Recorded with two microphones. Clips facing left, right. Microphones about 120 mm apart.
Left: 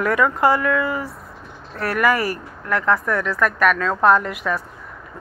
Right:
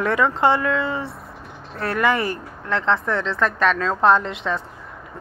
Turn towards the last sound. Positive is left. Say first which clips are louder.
# left 1 dB
turn(degrees=-25)  # may be behind; listen again after turning